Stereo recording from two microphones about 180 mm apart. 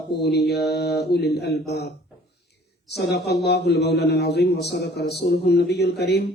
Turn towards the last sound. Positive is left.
turn(degrees=65)  # may be behind; listen again after turning